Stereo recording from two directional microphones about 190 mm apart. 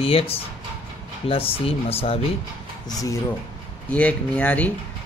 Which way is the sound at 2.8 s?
20° left (ahead or behind).